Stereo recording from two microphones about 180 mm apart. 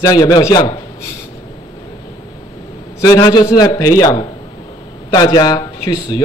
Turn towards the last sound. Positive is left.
turn(degrees=20)  # may be behind; listen again after turning